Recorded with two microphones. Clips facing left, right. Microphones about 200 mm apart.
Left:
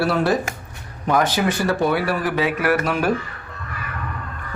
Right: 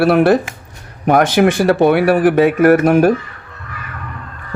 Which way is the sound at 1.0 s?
80° right.